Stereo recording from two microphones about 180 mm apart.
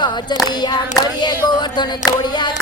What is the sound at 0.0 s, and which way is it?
Female singing, 25° left (ahead or behind).